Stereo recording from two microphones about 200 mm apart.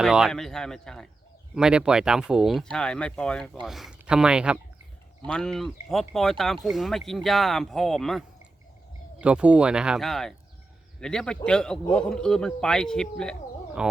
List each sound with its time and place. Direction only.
0.0 s speech: centre (ahead or behind)
9.2 s speech: 5° right (ahead or behind)